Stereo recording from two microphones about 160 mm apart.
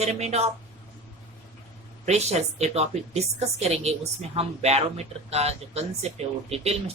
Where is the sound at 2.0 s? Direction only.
45° right (ahead or behind).